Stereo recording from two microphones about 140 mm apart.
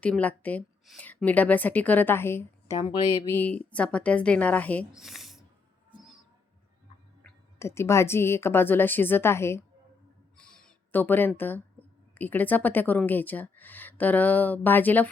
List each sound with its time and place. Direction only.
0.0 s speech: 10° left (ahead or behind)
2.7 s speech: 35° left (ahead or behind)
3.3 s speech: 10° left (ahead or behind)
4.9 s a sound: 5° right (ahead or behind)
7.6 s speech: 20° left (ahead or behind)
10.3 s a sound: 5° left (ahead or behind)
11.3 s speech: 15° left (ahead or behind)